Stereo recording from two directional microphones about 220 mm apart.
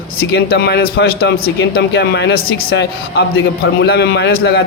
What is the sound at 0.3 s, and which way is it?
A man's voice, 50° left (ahead or behind).